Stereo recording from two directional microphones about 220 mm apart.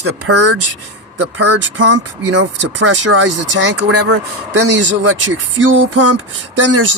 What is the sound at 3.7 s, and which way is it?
Speech, 90° right.